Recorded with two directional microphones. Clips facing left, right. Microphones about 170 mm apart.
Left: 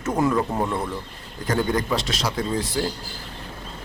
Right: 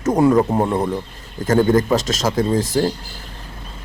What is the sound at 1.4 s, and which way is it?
Speech, 45° right (ahead or behind).